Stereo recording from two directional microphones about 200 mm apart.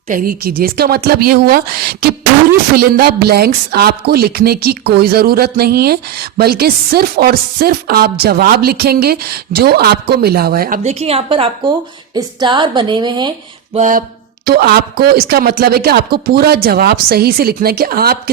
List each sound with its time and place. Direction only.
0.1 s speech: 45° right (ahead or behind)
10.8 s a woman's voice: 30° right (ahead or behind)
13.7 s a sound: 40° right (ahead or behind)
14.4 s speech: 50° right (ahead or behind)